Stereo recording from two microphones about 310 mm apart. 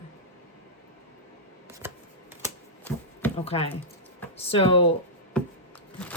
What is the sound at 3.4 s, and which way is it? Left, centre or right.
Speech, centre.